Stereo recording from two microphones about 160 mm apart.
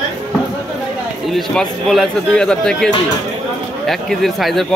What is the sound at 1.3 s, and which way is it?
Speech, centre (ahead or behind).